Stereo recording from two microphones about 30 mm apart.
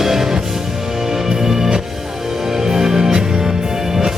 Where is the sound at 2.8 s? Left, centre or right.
Centre.